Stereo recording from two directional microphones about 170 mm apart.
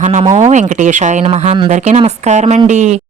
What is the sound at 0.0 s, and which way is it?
Speech, 45° right (ahead or behind).